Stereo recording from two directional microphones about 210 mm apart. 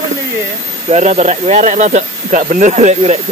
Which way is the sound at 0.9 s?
35° right (ahead or behind).